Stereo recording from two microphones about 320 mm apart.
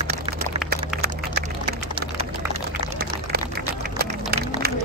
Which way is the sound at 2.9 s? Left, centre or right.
Right.